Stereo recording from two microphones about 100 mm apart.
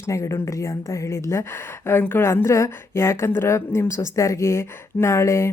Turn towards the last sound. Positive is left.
turn(degrees=30)  # may be behind; listen again after turning